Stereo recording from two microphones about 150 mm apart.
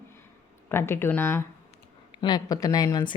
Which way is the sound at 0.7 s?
15° left (ahead or behind).